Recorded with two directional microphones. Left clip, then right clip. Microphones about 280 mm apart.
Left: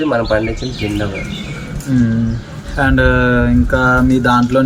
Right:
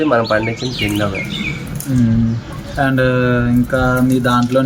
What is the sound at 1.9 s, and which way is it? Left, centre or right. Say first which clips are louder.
Speech: left 1 dB; centre.